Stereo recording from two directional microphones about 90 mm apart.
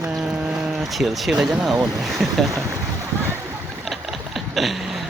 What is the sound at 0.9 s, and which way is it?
Speech, centre (ahead or behind).